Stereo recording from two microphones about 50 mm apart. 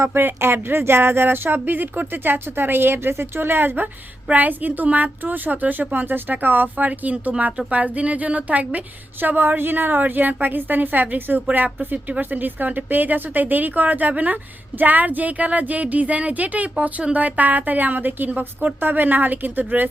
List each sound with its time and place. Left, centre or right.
0.0 s a woman's voice: right